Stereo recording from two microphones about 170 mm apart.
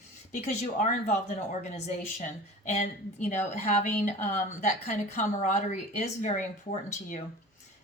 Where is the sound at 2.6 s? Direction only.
45° left (ahead or behind).